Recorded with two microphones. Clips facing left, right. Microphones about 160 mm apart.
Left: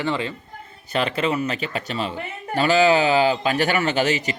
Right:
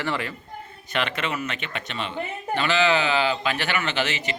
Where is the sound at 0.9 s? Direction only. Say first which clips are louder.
Left 5 dB; 30° left (ahead or behind).